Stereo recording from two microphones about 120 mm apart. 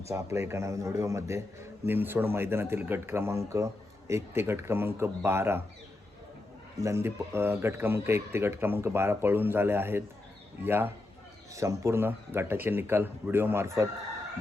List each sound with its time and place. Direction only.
0.1 s a man's voice: 25° right (ahead or behind)
6.8 s a man's voice: 20° right (ahead or behind)